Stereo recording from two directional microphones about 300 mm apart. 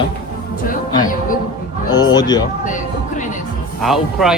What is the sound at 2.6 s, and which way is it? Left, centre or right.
Music, left.